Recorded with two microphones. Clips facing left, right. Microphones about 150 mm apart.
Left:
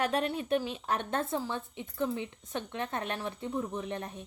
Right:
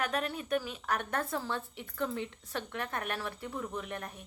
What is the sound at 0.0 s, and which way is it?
A woman's voice, 30° left (ahead or behind).